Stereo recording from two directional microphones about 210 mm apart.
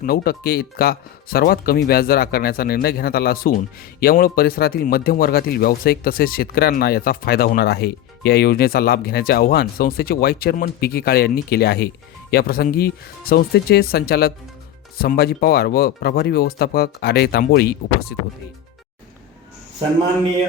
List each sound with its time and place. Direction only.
0.0 s speech: 45° left (ahead or behind)